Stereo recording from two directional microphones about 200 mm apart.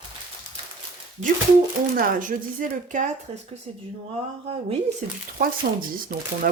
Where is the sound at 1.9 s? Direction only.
45° right (ahead or behind).